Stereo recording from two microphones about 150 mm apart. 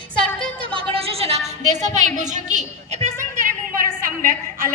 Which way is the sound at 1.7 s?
55° right (ahead or behind).